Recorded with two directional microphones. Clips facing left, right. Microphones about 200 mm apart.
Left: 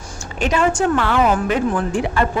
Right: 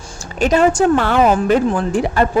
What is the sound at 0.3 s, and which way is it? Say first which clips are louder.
A man's voice: right 5 dB; 40° right (ahead or behind).